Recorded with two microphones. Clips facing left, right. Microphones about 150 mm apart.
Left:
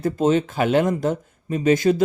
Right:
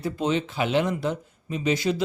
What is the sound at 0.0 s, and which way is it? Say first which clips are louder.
Speech: left 6 dB; 45° left (ahead or behind).